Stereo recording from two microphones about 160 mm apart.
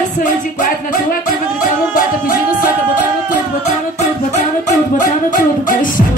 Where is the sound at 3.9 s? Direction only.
45° left (ahead or behind).